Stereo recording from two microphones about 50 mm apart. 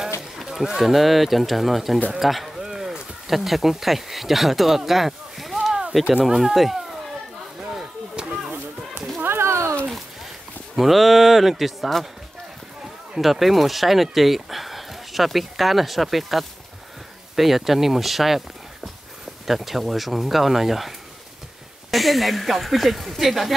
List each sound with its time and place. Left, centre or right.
0.5 s speech: centre
8.2 s a sound: centre
9.2 s a sound: right
10.8 s speech: centre
13.2 s speech: centre
19.4 s speech: centre
21.9 s speech: centre